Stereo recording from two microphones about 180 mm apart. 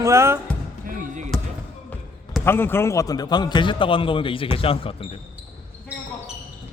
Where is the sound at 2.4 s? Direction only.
10° left (ahead or behind); by 5.1 s 30° left (ahead or behind).